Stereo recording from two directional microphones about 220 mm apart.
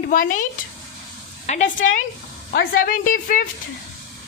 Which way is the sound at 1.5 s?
35° left (ahead or behind).